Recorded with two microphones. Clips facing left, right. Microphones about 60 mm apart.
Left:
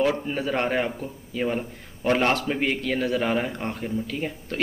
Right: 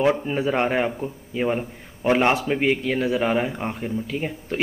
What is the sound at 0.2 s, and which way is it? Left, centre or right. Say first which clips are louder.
A man's voice: right 3 dB; centre.